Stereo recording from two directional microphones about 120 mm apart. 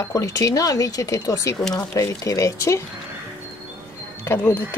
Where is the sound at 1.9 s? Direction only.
25° left (ahead or behind).